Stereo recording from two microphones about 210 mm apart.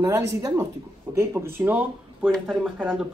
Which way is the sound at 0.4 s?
15° right (ahead or behind).